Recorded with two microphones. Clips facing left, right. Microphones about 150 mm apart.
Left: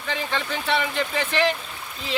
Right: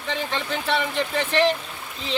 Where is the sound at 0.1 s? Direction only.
Centre (ahead or behind).